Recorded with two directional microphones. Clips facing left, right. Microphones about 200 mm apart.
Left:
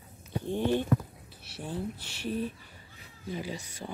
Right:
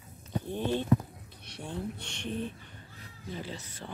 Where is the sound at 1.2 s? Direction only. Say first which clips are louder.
Left 2 dB; 5° left (ahead or behind).